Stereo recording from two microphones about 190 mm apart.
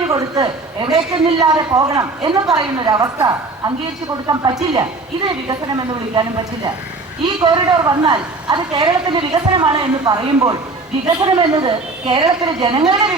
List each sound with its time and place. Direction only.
0.1 s a man's voice: 20° right (ahead or behind)
7.4 s a man's voice: 20° right (ahead or behind)